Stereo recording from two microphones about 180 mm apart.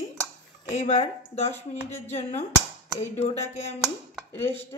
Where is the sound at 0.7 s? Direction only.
40° left (ahead or behind).